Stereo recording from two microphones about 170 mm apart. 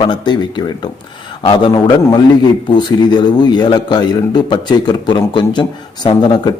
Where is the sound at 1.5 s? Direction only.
25° left (ahead or behind).